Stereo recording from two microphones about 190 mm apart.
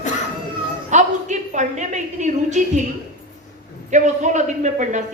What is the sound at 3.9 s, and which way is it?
Speech, 40° right (ahead or behind).